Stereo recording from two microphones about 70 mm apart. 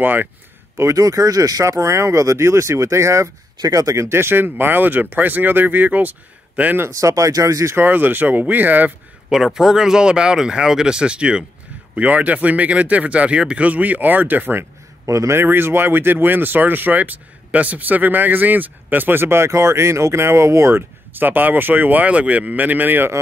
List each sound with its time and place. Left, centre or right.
0.0 s speech: right
0.7 s speech: right
7.0 s speech: right
7.7 s speech: right
9.3 s speech: centre; by 14.7 s right
15.0 s speech: right